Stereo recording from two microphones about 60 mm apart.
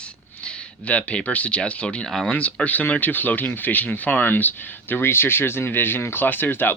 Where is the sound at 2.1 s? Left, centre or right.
Centre.